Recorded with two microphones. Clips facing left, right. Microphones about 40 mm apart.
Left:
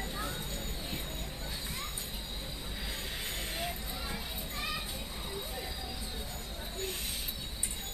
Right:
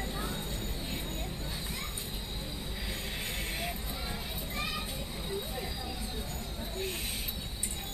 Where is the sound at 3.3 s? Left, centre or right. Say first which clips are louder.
Even; right.